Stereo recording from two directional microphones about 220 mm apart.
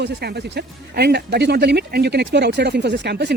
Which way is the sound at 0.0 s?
45° right (ahead or behind).